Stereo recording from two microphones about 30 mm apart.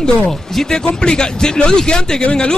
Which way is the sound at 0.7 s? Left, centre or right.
Left.